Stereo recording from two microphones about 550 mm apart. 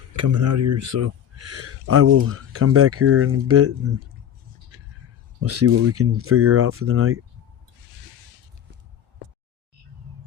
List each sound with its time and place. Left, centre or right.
0.1 s speech: right
5.4 s speech: right